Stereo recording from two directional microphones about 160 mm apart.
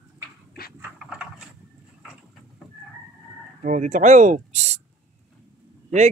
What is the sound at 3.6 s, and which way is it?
Speech, 50° right (ahead or behind).